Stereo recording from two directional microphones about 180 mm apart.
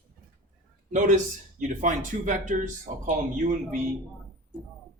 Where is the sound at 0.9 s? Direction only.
45° right (ahead or behind).